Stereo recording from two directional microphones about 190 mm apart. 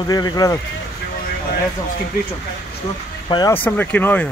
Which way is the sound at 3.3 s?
20° left (ahead or behind).